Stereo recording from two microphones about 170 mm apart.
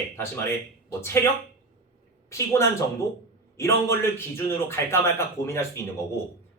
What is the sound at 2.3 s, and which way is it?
Speech, 15° left (ahead or behind).